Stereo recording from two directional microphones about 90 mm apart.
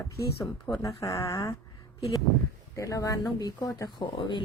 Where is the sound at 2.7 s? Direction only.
35° left (ahead or behind).